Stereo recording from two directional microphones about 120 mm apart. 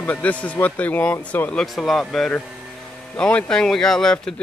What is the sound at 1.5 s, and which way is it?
Speech, 5° left (ahead or behind).